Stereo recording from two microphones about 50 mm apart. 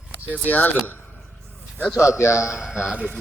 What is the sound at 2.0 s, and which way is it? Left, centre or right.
Speech, left.